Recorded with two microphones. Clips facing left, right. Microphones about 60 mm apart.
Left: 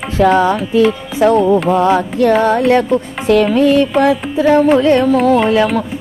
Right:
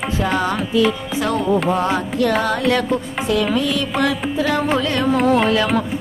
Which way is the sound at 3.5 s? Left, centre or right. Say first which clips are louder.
Left 9 dB; left.